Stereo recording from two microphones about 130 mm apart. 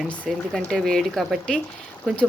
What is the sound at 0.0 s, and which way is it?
Speech, centre (ahead or behind).